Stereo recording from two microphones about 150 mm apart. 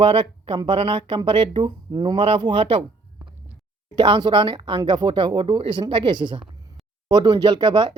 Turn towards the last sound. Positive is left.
turn(degrees=-30)  # may be behind; listen again after turning